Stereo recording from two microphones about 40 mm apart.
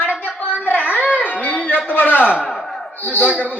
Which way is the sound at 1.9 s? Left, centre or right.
Left.